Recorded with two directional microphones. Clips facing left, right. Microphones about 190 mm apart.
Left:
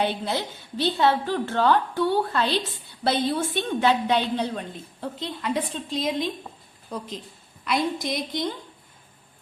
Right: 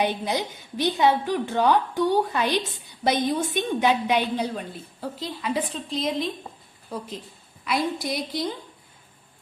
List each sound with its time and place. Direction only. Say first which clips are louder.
0.0 s a woman's voice: right 1 dB; 15° right (ahead or behind)